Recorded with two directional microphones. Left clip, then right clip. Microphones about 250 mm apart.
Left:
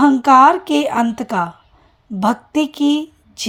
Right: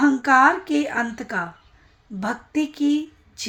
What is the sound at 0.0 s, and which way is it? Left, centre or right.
Speech, left.